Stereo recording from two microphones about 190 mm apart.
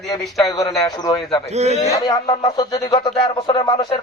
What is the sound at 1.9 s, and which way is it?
Speech, 20° left (ahead or behind).